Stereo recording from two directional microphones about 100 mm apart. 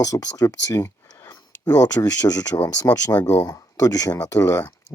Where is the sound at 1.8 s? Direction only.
40° left (ahead or behind).